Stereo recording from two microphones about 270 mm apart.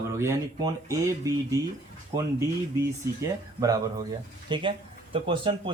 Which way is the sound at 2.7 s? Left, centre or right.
Centre.